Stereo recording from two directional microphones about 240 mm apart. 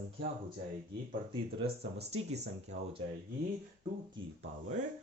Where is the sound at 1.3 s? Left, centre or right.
Right.